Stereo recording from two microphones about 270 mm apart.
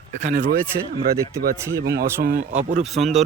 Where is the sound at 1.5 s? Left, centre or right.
Centre.